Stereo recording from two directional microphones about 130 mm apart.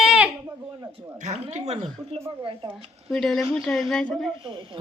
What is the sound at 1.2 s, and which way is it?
Speech, 65° right (ahead or behind).